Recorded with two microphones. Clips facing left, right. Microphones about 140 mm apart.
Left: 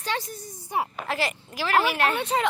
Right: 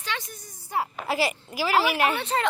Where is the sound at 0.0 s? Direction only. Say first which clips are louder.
Left 4 dB; 40° left (ahead or behind).